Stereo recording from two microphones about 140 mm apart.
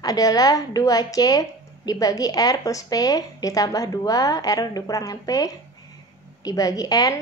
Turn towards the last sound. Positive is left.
turn(degrees=25)  # may be behind; listen again after turning